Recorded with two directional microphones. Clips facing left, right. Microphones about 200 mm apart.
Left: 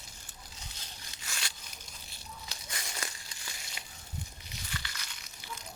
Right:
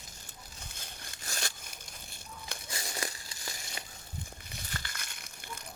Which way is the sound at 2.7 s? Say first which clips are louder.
Right 4 dB; 30° right (ahead or behind).